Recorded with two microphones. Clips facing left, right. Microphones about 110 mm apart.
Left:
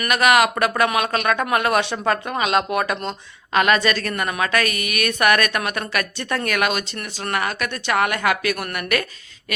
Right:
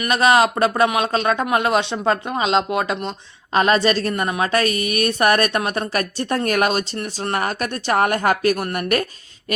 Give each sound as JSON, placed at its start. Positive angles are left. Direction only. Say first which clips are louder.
{"t": 0.1, "sound": "speech", "louder": "right 1 dB", "side_deg": -30}
{"t": 3.5, "sound": "a woman's voice", "louder": "right 2 dB", "side_deg": -35}